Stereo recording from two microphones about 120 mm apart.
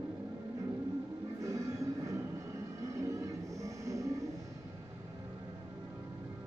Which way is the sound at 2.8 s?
25° right (ahead or behind).